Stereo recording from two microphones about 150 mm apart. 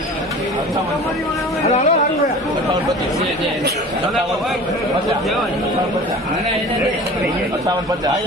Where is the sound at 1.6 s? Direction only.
45° left (ahead or behind).